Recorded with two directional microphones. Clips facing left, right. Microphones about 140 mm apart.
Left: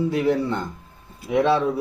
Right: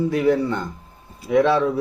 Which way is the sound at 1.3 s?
15° left (ahead or behind).